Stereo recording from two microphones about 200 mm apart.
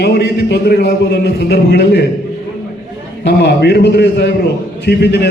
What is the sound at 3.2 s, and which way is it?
A man's voice, 55° left (ahead or behind).